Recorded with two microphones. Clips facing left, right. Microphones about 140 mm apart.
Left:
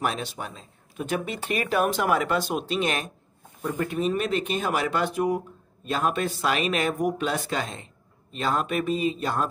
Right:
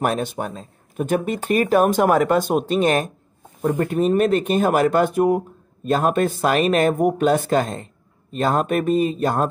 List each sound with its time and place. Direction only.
0.0 s speech: 50° right (ahead or behind)